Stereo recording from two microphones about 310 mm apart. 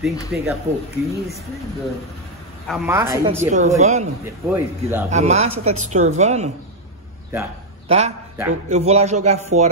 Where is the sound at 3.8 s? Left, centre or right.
Right.